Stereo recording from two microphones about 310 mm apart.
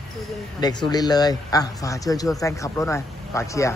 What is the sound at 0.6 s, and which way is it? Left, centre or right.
Speech, centre.